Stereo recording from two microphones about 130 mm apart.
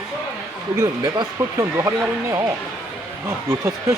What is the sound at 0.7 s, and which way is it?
Speech, 25° right (ahead or behind).